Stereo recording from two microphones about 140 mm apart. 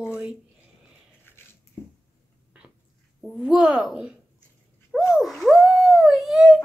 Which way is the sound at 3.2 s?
5° right (ahead or behind).